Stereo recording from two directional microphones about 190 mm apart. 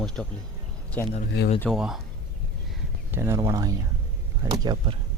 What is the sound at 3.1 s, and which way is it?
Speech, 15° right (ahead or behind).